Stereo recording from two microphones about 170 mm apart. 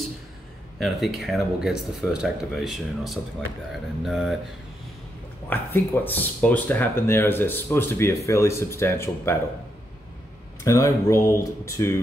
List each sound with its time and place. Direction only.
0.7 s speech: centre (ahead or behind)
5.5 s speech: 10° left (ahead or behind)
10.6 s speech: 20° left (ahead or behind)